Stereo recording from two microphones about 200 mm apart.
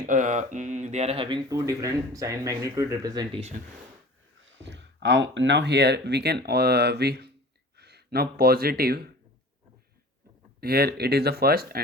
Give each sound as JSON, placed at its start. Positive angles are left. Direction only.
{"t": 0.0, "sound": "speech", "side_deg": -40}
{"t": 4.4, "sound": "speech", "side_deg": -65}
{"t": 10.6, "sound": "speech", "side_deg": -50}